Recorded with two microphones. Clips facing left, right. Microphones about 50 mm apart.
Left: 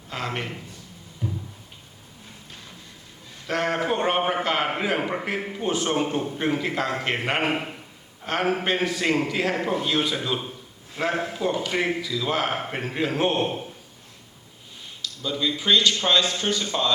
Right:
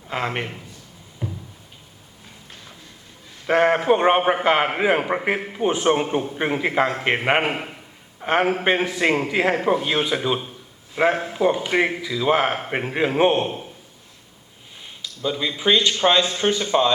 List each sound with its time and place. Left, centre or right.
0.1 s speech: right
1.2 s a sound: right
3.4 s a man's voice: right
15.0 s speech: right